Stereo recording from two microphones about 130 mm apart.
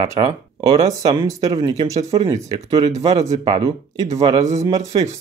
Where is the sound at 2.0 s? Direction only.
50° right (ahead or behind).